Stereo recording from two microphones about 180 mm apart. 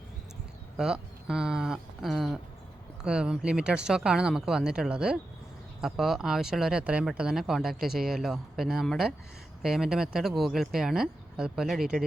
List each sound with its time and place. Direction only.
0.8 s speech: 5° right (ahead or behind)